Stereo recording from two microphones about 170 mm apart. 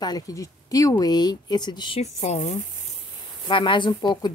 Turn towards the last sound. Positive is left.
turn(degrees=25)  # may be behind; listen again after turning